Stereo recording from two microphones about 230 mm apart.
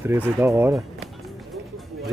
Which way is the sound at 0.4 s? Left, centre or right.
Centre.